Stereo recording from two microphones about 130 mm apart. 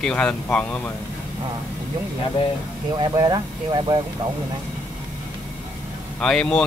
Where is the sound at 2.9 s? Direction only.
30° right (ahead or behind).